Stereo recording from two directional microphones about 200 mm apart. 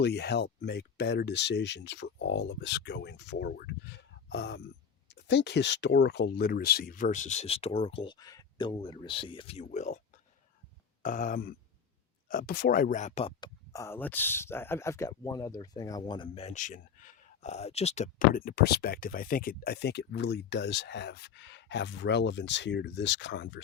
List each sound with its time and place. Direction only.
0.0 s speech: 55° left (ahead or behind); by 10.0 s 35° left (ahead or behind)
11.0 s speech: 40° left (ahead or behind)
13.4 s speech: 15° left (ahead or behind); by 23.6 s 60° left (ahead or behind)